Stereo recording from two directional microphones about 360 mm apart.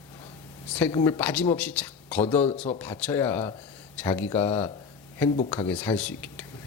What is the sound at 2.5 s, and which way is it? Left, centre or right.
Speech, centre.